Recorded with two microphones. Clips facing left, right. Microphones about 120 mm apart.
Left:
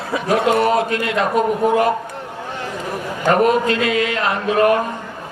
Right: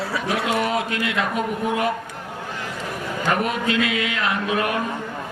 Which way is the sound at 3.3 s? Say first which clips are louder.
Left 8 dB; 40° left (ahead or behind).